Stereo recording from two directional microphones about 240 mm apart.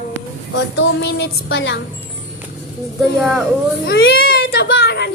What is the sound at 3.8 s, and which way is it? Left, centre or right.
Baby cry, left.